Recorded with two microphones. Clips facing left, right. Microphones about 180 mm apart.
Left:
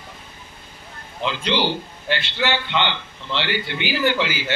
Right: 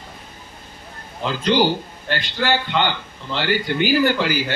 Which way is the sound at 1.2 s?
45° right (ahead or behind).